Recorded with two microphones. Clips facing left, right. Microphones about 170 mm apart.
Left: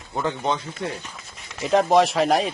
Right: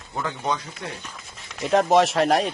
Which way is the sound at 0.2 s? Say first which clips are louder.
Left 3 dB; 25° left (ahead or behind).